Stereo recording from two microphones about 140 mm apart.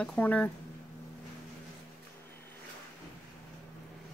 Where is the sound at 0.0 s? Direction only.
10° left (ahead or behind).